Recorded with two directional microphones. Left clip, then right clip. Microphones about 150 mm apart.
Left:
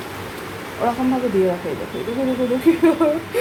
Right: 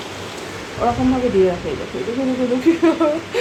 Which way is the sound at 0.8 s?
25° right (ahead or behind).